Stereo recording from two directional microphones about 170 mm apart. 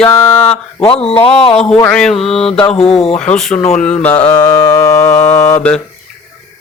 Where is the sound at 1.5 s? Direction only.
5° left (ahead or behind).